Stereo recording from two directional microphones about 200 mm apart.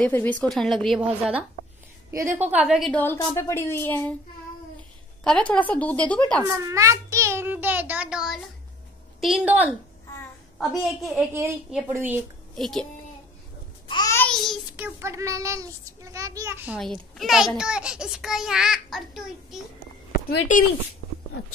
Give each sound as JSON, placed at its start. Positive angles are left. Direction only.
{"t": 0.0, "sound": "a child's voice", "side_deg": 10}
{"t": 2.3, "sound": "a child's voice", "side_deg": -10}
{"t": 5.2, "sound": "a woman's voice", "side_deg": 5}
{"t": 6.4, "sound": "a child's voice", "side_deg": -15}
{"t": 11.1, "sound": "a woman's voice", "side_deg": -10}
{"t": 12.5, "sound": "speech", "side_deg": 0}
{"t": 13.8, "sound": "babbling", "side_deg": 20}
{"t": 14.1, "sound": "child singing", "side_deg": 5}
{"t": 16.7, "sound": "a child's voice", "side_deg": 0}
{"t": 20.1, "sound": "a sound", "side_deg": 45}